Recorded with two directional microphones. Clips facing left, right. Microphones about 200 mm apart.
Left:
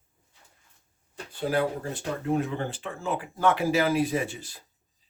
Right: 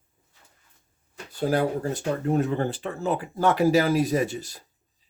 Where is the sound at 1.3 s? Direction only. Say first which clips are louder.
Right 3 dB; 40° right (ahead or behind).